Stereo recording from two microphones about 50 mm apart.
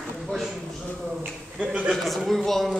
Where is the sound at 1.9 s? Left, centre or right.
Centre.